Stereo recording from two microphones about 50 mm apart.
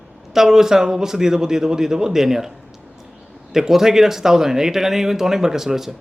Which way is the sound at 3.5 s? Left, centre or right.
Centre.